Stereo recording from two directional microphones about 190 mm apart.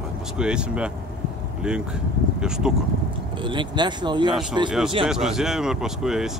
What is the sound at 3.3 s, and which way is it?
Speech, 25° right (ahead or behind).